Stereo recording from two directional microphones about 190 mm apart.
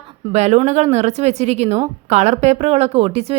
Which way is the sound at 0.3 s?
35° right (ahead or behind).